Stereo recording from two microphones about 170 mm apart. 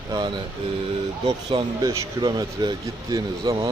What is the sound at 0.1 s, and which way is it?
Speech, 25° right (ahead or behind).